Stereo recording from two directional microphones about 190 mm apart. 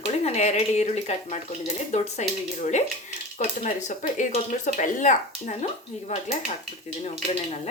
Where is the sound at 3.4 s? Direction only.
40° left (ahead or behind).